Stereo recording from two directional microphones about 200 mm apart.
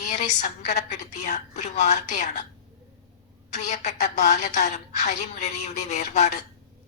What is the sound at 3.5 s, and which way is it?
A woman's voice, 35° left (ahead or behind).